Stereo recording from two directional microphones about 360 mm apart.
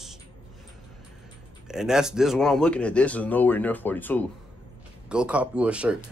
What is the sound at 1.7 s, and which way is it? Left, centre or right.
Speech, centre.